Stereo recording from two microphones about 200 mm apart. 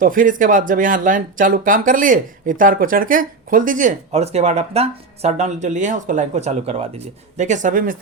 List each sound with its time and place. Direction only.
0.0 s speech: 45° right (ahead or behind)